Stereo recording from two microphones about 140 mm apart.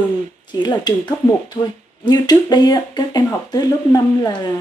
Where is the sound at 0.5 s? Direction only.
30° left (ahead or behind).